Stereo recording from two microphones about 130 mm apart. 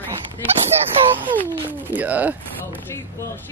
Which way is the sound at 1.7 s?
15° right (ahead or behind).